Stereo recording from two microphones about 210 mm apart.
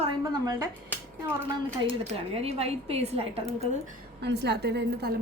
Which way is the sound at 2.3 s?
30° right (ahead or behind).